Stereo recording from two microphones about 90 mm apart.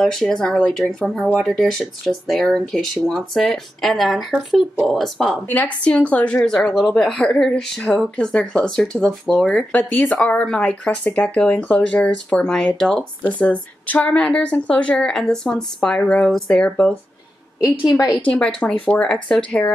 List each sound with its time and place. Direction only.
0.0 s speech: 5° left (ahead or behind)
5.5 s a woman's voice: 15° left (ahead or behind); by 9.5 s centre (ahead or behind)
9.5 s a woman's voice: 15° left (ahead or behind)
17.6 s a woman's voice: 40° left (ahead or behind)
18.3 s a woman's voice: 5° left (ahead or behind)